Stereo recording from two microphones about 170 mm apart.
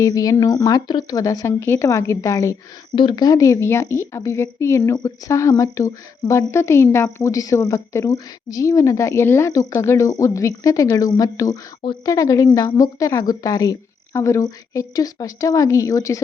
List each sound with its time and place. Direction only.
0.0 s a woman's voice: 20° left (ahead or behind)